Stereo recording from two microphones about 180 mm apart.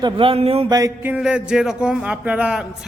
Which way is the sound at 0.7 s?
15° right (ahead or behind).